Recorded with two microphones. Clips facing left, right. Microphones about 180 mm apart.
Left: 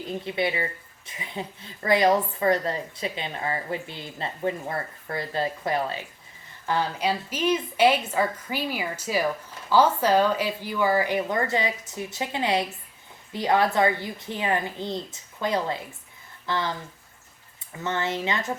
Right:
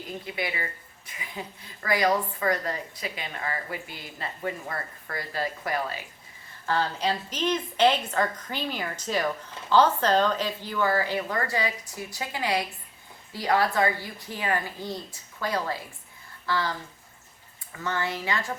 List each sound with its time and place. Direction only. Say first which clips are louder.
0.3 s a woman's voice: left 6 dB; 25° left (ahead or behind)
6.7 s a woman's voice: left 1 dB; 10° left (ahead or behind)
17.8 s a woman's voice: left 2 dB; 20° left (ahead or behind)